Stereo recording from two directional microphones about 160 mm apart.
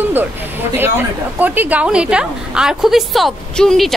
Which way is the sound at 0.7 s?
10° right (ahead or behind).